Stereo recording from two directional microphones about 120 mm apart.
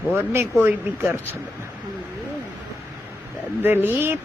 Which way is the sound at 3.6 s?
15° right (ahead or behind).